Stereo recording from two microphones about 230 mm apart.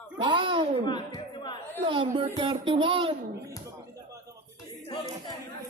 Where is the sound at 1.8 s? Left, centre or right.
Right.